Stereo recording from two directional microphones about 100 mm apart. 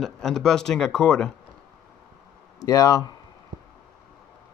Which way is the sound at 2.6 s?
35° left (ahead or behind).